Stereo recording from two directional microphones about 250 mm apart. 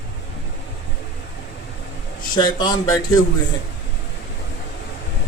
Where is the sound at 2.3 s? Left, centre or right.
Centre.